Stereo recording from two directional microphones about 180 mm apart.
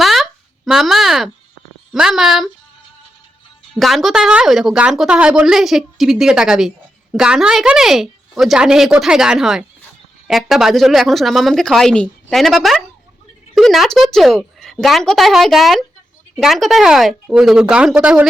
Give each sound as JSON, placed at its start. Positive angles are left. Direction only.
{"t": 0.0, "sound": "a sound", "side_deg": 0}
{"t": 1.9, "sound": "a woman's voice", "side_deg": 0}
{"t": 3.8, "sound": "a woman's voice", "side_deg": 0}